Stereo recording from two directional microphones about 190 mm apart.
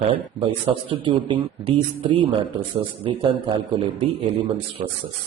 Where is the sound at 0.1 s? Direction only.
30° right (ahead or behind).